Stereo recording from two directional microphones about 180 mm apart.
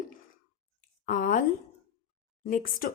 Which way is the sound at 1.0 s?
50° left (ahead or behind).